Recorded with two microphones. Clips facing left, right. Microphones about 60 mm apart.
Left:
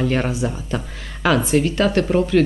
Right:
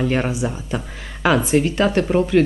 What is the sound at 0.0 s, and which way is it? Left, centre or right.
Speech, centre.